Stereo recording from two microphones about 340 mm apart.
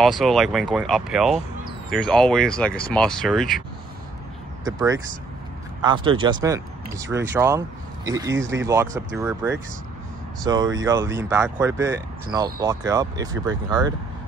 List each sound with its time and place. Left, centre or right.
0.0 s speech: centre
4.6 s speech: centre
8.4 s speech: right
8.6 s speech: centre